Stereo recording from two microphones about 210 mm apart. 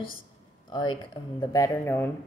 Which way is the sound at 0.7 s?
20° left (ahead or behind).